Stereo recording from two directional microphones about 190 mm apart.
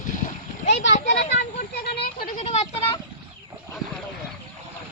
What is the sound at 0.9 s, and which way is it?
Speech, 35° left (ahead or behind).